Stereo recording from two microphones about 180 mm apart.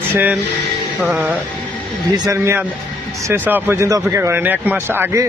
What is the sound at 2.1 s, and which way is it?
Speech, 20° right (ahead or behind).